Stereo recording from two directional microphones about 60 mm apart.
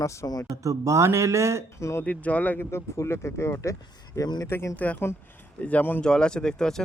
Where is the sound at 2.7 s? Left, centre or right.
Left.